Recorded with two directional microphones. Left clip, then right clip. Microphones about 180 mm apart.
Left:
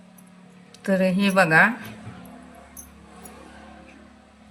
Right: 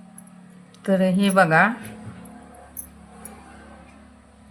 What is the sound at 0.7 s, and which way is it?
Speech, 15° right (ahead or behind).